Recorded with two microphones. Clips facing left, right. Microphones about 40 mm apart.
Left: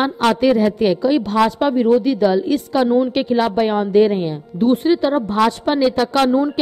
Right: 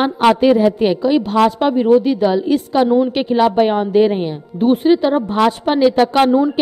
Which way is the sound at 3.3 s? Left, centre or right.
Centre.